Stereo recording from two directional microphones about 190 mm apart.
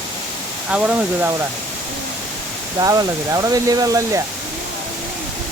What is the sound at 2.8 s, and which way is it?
Speech, 20° right (ahead or behind).